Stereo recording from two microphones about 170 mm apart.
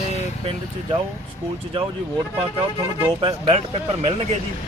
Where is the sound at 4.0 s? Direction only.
35° right (ahead or behind).